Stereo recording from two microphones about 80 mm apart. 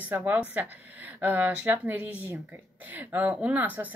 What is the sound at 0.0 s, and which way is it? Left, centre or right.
Speech, right.